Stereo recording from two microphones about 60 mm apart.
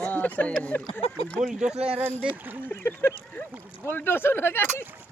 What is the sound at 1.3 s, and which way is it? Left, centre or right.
Speech, centre.